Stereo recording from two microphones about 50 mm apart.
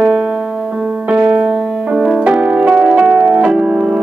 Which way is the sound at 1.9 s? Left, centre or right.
Centre.